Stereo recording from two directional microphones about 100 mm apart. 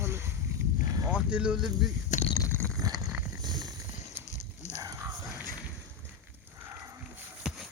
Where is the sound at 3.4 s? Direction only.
45° right (ahead or behind).